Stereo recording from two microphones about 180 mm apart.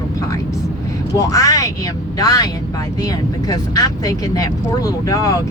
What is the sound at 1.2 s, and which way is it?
Speech, 20° left (ahead or behind).